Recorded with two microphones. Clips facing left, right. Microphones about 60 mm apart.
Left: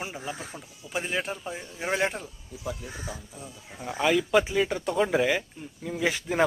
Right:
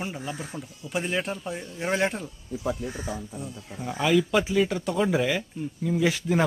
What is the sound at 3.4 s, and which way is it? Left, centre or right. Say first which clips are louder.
Speech: right 4 dB; centre.